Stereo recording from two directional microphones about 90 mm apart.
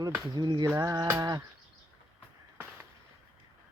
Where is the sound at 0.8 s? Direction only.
40° right (ahead or behind).